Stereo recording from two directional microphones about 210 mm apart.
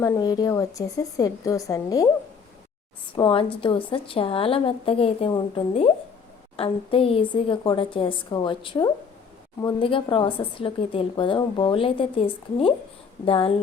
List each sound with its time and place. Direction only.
0.0 s a woman's voice: 20° left (ahead or behind)
3.2 s speech: 25° left (ahead or behind)